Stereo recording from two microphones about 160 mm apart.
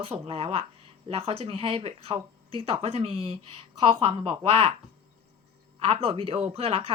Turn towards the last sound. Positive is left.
turn(degrees=-40)  # may be behind; listen again after turning